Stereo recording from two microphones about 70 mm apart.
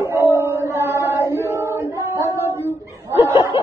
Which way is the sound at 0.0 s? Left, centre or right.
Right.